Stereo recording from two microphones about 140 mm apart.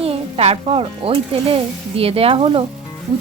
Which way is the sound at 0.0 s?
45° right (ahead or behind).